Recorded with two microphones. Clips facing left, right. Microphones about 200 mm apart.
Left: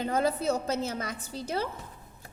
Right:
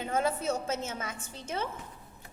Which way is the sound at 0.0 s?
35° left (ahead or behind).